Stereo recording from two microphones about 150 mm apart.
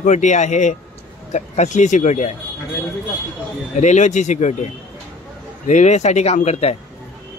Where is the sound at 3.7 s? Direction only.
50° left (ahead or behind).